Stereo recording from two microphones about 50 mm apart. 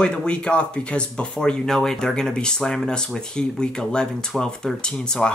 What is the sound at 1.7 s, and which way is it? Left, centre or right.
Speech, centre.